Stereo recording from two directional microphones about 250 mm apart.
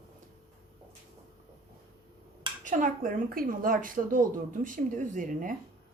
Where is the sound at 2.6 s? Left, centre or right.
Right.